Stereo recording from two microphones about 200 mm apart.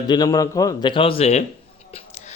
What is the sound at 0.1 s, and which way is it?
Speech, 20° left (ahead or behind).